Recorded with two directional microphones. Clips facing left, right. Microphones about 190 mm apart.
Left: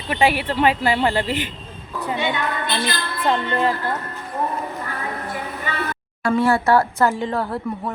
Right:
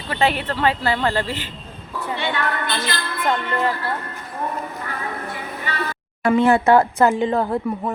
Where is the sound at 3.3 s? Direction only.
25° left (ahead or behind).